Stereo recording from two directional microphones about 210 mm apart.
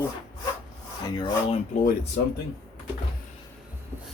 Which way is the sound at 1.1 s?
20° left (ahead or behind).